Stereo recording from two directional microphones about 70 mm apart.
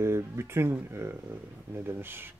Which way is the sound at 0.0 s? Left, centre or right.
Right.